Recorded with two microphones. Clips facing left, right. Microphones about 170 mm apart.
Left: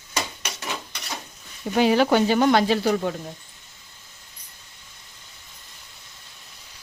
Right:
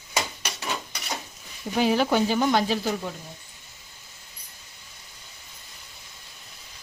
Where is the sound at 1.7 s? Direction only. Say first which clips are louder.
Left 4 dB; 75° left (ahead or behind).